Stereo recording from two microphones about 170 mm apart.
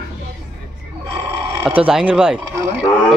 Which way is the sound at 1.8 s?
5° right (ahead or behind).